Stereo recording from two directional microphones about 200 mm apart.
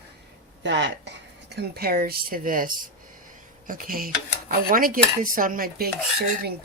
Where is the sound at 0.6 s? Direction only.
60° right (ahead or behind).